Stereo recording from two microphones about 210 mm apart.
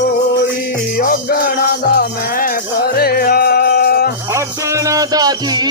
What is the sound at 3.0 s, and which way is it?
Music, 45° left (ahead or behind).